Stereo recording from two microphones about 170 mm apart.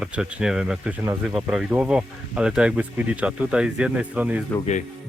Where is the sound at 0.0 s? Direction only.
5° right (ahead or behind).